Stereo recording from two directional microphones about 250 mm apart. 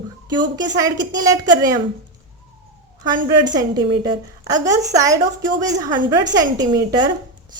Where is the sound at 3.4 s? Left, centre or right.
Right.